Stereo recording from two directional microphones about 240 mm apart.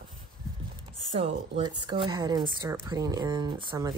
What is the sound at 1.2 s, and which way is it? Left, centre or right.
Speech, right.